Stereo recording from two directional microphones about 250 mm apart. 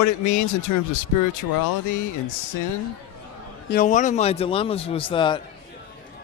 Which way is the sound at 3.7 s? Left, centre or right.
Left.